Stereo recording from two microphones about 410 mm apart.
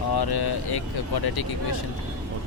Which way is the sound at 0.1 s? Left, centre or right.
Left.